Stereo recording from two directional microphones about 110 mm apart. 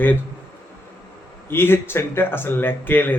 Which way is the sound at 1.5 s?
20° left (ahead or behind).